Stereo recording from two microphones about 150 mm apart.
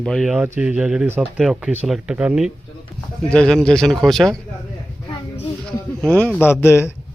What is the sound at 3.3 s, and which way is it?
Speech, 5° left (ahead or behind).